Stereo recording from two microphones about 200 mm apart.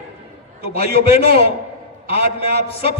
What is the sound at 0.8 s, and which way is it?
Speech, 50° right (ahead or behind).